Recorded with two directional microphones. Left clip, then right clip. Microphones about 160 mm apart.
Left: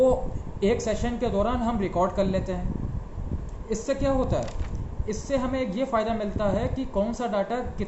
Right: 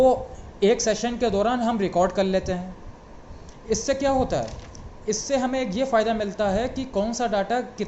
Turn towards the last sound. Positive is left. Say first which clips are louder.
# right 3 dB
turn(degrees=-50)  # may be behind; listen again after turning